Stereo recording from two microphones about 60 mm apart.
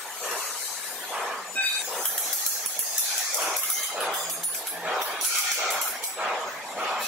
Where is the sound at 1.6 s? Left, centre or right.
Left.